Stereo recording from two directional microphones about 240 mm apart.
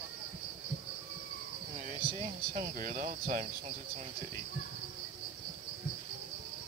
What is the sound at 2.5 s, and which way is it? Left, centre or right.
Speech, right.